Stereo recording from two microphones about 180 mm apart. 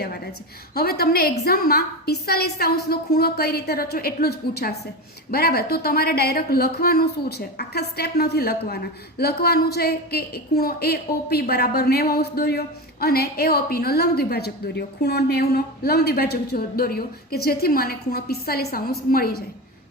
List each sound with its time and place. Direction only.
0.7 s a woman's voice: 60° left (ahead or behind)